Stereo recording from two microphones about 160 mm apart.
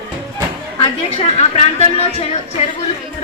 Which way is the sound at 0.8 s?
40° left (ahead or behind).